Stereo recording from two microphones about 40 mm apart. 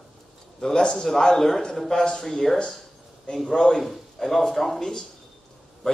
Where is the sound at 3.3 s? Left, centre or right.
Left.